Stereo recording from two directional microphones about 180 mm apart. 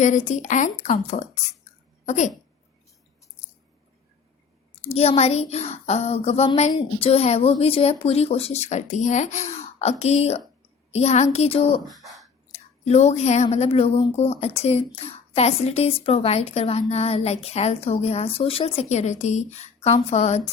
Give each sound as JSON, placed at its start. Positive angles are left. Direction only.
{"t": 0.0, "sound": "a child's voice", "side_deg": 40}
{"t": 4.9, "sound": "a child's voice", "side_deg": 35}
{"t": 11.9, "sound": "speech", "side_deg": 0}
{"t": 12.5, "sound": "a child's voice", "side_deg": 35}